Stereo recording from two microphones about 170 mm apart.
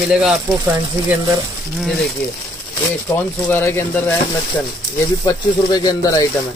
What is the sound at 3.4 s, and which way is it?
Speech, 10° left (ahead or behind).